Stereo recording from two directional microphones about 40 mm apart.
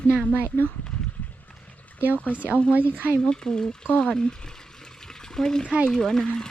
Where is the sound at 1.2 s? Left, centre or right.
Left.